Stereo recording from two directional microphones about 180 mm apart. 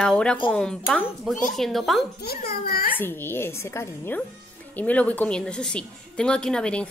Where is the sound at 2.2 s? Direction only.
55° left (ahead or behind).